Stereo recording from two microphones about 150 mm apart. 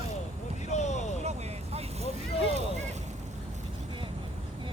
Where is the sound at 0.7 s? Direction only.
50° left (ahead or behind).